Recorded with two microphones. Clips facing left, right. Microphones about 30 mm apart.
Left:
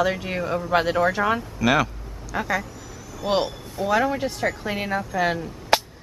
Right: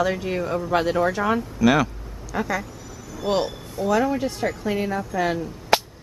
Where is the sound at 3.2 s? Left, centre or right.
Left.